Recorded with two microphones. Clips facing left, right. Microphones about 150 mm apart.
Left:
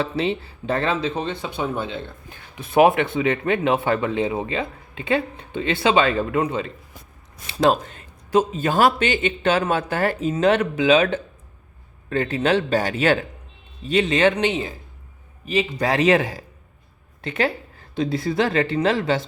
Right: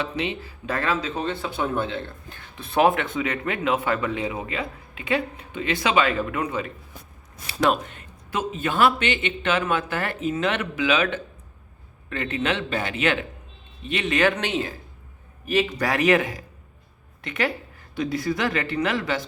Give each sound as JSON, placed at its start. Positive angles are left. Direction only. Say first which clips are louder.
{"t": 0.0, "sound": "speech", "louder": "left 5 dB", "side_deg": 30}